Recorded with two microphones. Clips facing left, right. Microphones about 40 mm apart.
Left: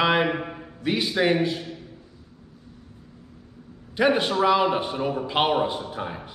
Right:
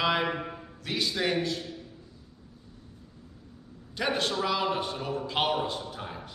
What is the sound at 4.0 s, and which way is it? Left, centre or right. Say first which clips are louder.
A man's voice: left 8 dB; left.